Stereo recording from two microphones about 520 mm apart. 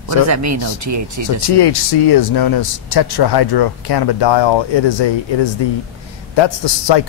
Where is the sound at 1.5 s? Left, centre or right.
Left.